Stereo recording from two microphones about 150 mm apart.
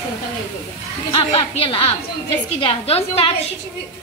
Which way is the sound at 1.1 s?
40° left (ahead or behind).